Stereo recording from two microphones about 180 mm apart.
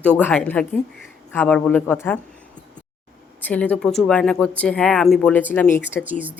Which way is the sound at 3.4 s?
10° left (ahead or behind).